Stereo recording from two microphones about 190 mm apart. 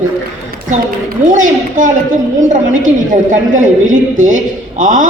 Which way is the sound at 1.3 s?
45° right (ahead or behind).